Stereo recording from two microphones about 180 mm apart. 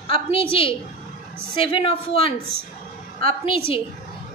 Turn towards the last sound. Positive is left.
turn(degrees=30)  # may be behind; listen again after turning